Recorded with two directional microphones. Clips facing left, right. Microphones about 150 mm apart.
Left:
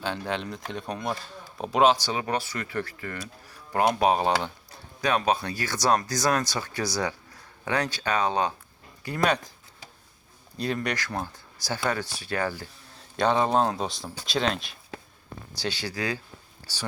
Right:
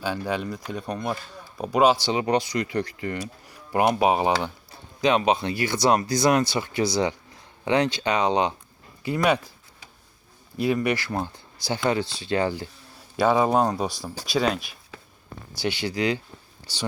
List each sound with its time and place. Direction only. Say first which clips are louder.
0.0 s speech: right 3 dB; 5° right (ahead or behind)
2.0 s speech: right 6 dB; 20° right (ahead or behind)
10.6 s speech: right 6 dB; 10° right (ahead or behind)
13.1 s speech: right 3 dB; 5° right (ahead or behind)